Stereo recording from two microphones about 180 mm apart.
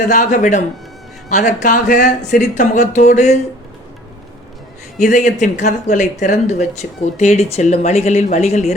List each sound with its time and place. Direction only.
0.0 s speech: 45° left (ahead or behind)
4.9 s speech: 45° left (ahead or behind)